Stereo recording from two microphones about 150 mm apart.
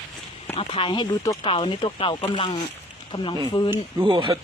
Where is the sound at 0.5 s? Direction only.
40° left (ahead or behind).